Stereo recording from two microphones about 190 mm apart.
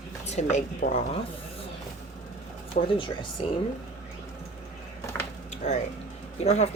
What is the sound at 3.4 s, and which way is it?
Speech, 30° left (ahead or behind).